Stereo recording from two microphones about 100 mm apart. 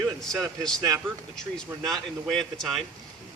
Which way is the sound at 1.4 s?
5° left (ahead or behind).